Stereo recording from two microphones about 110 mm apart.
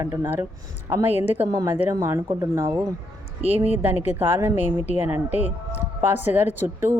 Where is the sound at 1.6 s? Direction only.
20° right (ahead or behind).